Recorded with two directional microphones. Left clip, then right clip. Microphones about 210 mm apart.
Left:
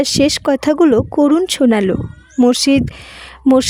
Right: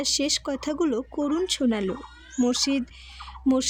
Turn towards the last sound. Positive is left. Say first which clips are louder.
# left 12 dB
turn(degrees=40)  # may be behind; listen again after turning